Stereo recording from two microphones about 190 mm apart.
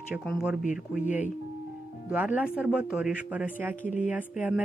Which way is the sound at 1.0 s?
40° left (ahead or behind).